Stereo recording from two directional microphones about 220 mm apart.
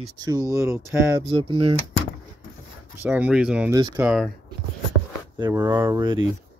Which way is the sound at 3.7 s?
15° right (ahead or behind).